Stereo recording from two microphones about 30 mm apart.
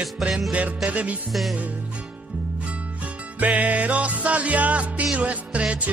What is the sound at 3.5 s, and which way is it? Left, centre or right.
Music, right.